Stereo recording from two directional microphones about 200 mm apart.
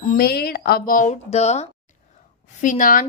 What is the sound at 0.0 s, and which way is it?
Speech, 45° left (ahead or behind).